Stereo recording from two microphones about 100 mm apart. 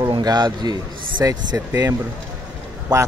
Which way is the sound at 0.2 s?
45° right (ahead or behind).